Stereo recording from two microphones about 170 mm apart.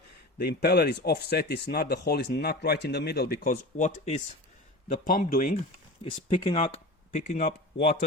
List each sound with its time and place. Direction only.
0.3 s speech: 75° left (ahead or behind); by 5.5 s 55° left (ahead or behind)
6.1 s speech: 30° left (ahead or behind)
7.1 s speech: 50° left (ahead or behind)